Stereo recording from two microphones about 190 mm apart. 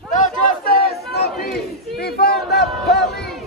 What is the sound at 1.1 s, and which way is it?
Crowd, 55° left (ahead or behind).